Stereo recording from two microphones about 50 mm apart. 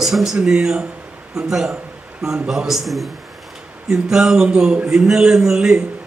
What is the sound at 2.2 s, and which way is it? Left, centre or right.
Speech, right.